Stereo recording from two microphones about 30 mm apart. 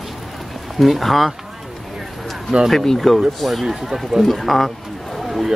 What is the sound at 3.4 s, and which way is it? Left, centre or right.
Speech, centre.